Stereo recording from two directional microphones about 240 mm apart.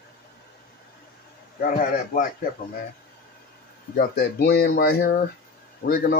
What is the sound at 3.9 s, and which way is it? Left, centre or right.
Speech, left.